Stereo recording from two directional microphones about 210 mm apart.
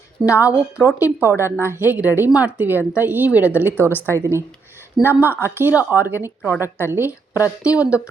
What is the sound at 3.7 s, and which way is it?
Speech, 10° left (ahead or behind).